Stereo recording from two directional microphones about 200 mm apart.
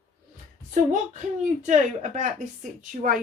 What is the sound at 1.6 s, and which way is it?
A woman's voice, 40° right (ahead or behind).